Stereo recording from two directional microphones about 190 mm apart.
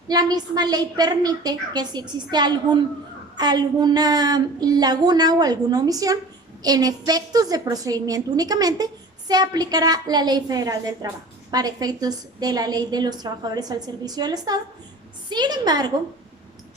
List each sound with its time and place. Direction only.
0.1 s a woman's voice: 20° right (ahead or behind)